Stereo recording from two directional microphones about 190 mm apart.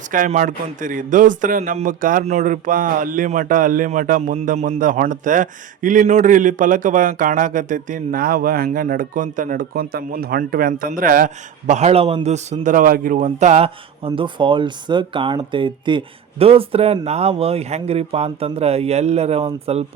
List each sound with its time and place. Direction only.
0.1 s a man's voice: 40° right (ahead or behind)